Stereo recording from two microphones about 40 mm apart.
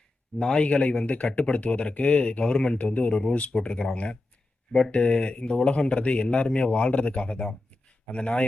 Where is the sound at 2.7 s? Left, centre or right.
Left.